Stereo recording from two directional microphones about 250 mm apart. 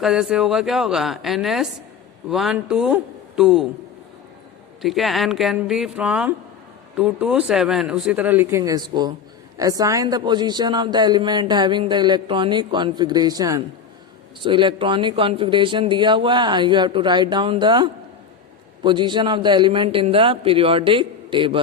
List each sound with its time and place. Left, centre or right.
0.0 s speech: centre
4.8 s speech: centre